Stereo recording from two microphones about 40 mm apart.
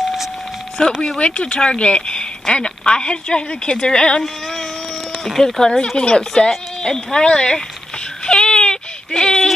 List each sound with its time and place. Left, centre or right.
1.0 s speech: left
5.4 s speech: centre
8.3 s a sound: left